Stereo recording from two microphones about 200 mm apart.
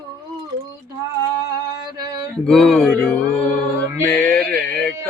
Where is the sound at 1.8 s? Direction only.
20° right (ahead or behind).